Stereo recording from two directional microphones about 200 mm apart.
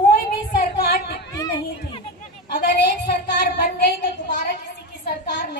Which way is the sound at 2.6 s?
55° left (ahead or behind).